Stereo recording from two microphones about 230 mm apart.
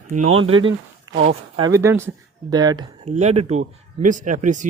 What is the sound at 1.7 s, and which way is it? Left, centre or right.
Speech, centre.